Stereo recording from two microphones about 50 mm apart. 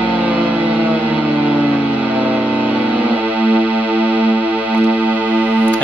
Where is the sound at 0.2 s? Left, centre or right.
Right.